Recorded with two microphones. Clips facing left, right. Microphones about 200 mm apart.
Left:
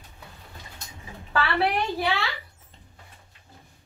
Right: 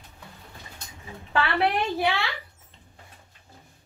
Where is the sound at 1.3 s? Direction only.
15° right (ahead or behind).